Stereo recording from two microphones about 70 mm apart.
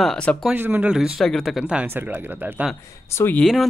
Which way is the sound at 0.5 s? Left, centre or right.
Right.